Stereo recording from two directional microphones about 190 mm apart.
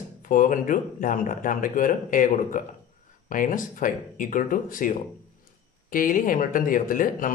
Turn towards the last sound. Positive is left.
turn(degrees=45)  # may be behind; listen again after turning